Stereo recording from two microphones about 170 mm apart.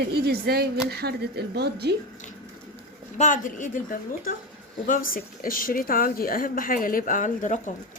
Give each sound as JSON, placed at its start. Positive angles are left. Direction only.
{"t": 0.0, "sound": "speech", "side_deg": -70}
{"t": 3.2, "sound": "a woman's voice", "side_deg": 50}